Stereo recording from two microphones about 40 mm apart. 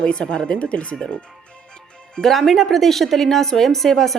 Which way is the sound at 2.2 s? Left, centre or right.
Centre.